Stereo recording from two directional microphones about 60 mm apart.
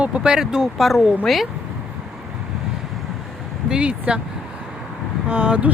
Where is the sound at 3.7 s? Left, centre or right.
Centre.